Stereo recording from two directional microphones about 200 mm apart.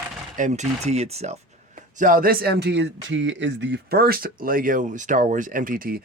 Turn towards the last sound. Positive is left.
turn(degrees=-45)  # may be behind; listen again after turning